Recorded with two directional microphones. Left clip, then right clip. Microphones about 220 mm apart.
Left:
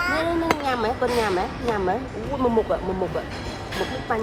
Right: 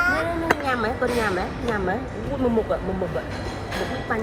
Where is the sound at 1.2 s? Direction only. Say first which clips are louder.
Left 1 dB; 45° left (ahead or behind).